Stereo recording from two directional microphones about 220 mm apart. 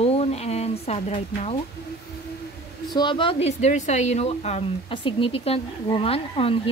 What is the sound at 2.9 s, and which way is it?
Speech, 20° left (ahead or behind).